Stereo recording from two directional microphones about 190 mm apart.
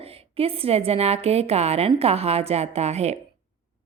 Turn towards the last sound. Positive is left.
turn(degrees=-35)  # may be behind; listen again after turning